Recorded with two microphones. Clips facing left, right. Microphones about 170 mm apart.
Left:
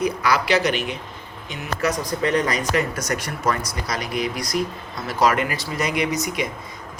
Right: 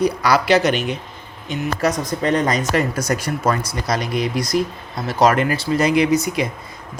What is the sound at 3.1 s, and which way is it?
Speech, 30° right (ahead or behind).